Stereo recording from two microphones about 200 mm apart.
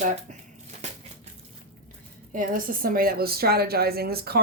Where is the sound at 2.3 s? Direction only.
45° right (ahead or behind).